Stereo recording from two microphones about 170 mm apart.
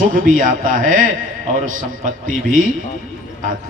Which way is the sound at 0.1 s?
50° right (ahead or behind).